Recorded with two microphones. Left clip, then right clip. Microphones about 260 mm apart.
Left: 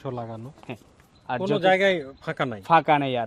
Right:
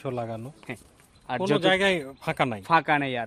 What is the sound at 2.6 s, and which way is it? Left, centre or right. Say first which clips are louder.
Speech: left 4 dB; centre.